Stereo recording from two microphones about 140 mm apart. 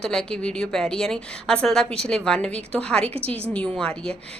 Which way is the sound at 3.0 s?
45° right (ahead or behind).